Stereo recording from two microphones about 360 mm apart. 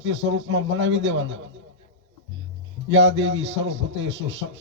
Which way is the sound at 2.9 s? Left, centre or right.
Right.